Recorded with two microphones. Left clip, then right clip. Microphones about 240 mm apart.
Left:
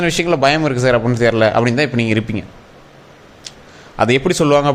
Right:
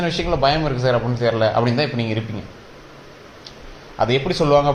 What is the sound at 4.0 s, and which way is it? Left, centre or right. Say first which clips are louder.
Speech: left 5 dB; left.